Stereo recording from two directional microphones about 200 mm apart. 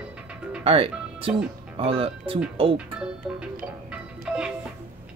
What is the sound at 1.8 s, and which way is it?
Speech, 25° right (ahead or behind).